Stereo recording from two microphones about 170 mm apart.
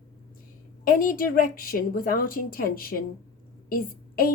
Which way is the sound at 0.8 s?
55° left (ahead or behind).